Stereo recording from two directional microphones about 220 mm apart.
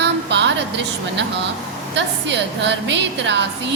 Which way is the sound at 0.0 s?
50° right (ahead or behind).